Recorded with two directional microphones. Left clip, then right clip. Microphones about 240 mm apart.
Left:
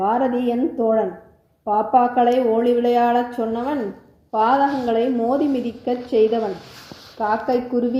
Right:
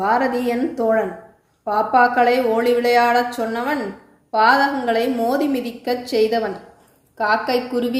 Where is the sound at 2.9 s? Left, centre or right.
Right.